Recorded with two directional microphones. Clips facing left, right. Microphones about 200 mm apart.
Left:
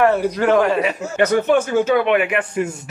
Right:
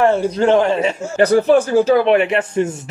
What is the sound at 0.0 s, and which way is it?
Speech, 25° right (ahead or behind).